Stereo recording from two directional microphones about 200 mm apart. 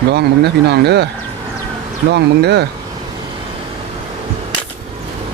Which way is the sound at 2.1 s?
55° right (ahead or behind).